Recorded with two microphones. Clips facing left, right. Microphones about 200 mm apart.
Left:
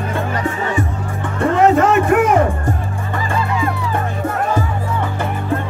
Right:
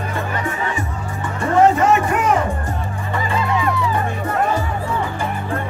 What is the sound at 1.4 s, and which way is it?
Music, 55° left (ahead or behind).